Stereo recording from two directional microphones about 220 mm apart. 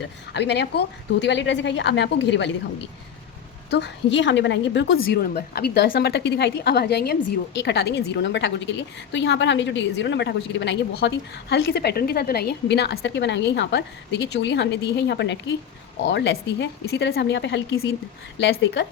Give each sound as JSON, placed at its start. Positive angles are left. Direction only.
{"t": 0.3, "sound": "a woman's voice", "side_deg": 50}
{"t": 3.7, "sound": "a woman's voice", "side_deg": 50}